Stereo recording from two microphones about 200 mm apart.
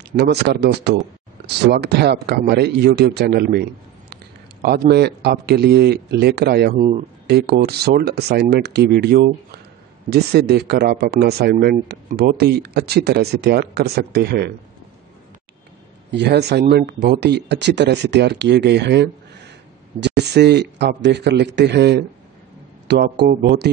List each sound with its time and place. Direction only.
0.1 s a man's voice: 55° right (ahead or behind)
16.1 s speech: 55° right (ahead or behind)